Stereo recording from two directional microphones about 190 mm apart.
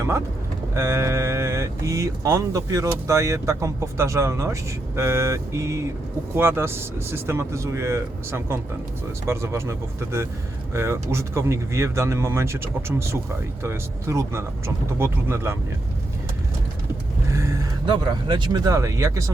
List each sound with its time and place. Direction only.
0.7 s speech: 15° right (ahead or behind)
17.3 s a sound: 15° right (ahead or behind)
17.9 s speech: 25° right (ahead or behind)